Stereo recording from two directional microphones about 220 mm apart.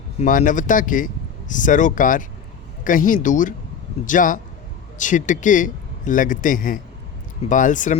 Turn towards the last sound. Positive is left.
turn(degrees=35)  # may be behind; listen again after turning